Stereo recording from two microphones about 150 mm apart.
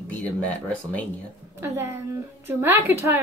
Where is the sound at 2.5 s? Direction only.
15° right (ahead or behind).